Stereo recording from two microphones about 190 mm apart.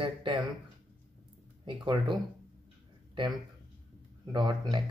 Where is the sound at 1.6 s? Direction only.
25° right (ahead or behind).